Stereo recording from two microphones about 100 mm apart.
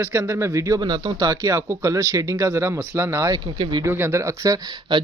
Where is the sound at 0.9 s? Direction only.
45° right (ahead or behind).